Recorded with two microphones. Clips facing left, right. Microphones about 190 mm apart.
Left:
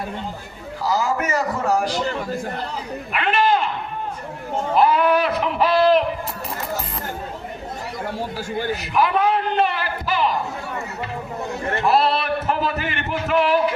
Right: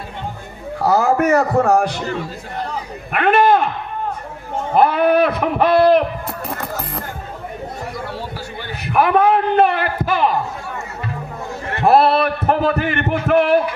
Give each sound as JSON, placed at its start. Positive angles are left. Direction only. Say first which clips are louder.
{"t": 0.8, "sound": "speech", "louder": "right 6 dB", "side_deg": -55}
{"t": 3.1, "sound": "speech", "louder": "right 6 dB", "side_deg": -55}
{"t": 4.7, "sound": "speech", "louder": "right 3 dB", "side_deg": -55}
{"t": 8.7, "sound": "a man's voice", "louder": "right 6 dB", "side_deg": -55}
{"t": 11.8, "sound": "a sound", "louder": "right 6 dB", "side_deg": -55}